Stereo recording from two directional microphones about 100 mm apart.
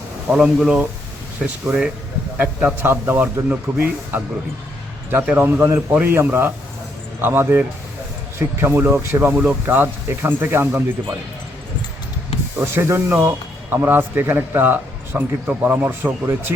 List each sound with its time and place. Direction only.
0.3 s a man's voice: 5° right (ahead or behind)
5.2 s speech: 15° right (ahead or behind)
12.7 s speech: 25° right (ahead or behind)